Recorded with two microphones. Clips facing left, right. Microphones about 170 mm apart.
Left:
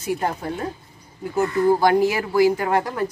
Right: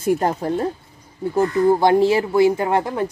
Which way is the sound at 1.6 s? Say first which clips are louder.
Right 2 dB; 25° right (ahead or behind).